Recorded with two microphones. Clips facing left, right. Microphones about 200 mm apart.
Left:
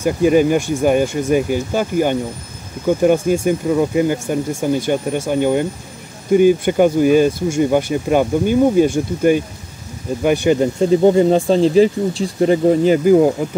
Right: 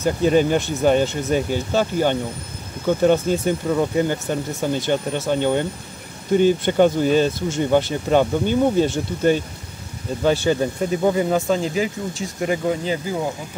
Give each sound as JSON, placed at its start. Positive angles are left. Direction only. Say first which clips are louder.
{"t": 0.0, "sound": "speech", "louder": "left 4 dB", "side_deg": 10}
{"t": 12.8, "sound": "speech", "louder": "left 13 dB", "side_deg": 55}